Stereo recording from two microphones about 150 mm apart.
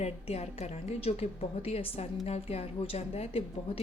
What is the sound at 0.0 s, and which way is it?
A woman's voice, 45° left (ahead or behind).